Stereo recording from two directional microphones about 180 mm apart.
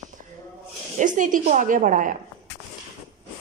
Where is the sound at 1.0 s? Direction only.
45° right (ahead or behind).